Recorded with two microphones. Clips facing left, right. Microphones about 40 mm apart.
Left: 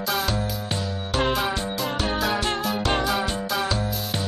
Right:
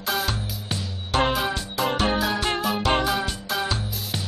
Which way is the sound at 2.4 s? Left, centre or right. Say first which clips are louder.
Right 1 dB; centre.